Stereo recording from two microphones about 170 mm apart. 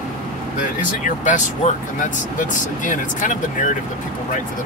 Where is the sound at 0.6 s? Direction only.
50° left (ahead or behind).